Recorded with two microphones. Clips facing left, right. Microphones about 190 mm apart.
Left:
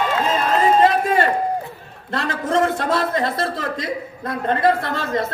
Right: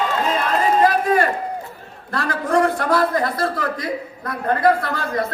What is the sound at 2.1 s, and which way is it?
A man's voice, 25° left (ahead or behind).